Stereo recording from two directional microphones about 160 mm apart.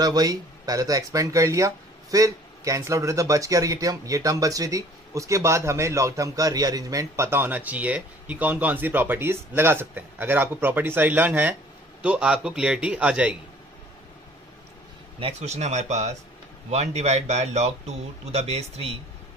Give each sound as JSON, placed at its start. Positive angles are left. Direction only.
{"t": 0.0, "sound": "a man's voice", "side_deg": -25}
{"t": 15.1, "sound": "speech", "side_deg": -40}